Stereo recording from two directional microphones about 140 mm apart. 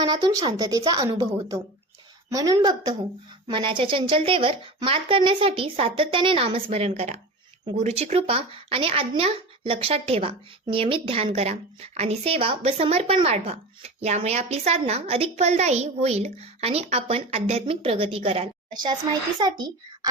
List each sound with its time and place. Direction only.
0.0 s a woman's voice: 30° right (ahead or behind)
18.7 s a woman's voice: 30° right (ahead or behind)